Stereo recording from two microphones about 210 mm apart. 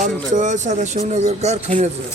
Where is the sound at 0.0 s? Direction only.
35° right (ahead or behind).